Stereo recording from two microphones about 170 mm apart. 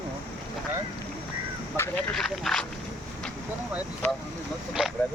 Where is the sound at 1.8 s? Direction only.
15° left (ahead or behind).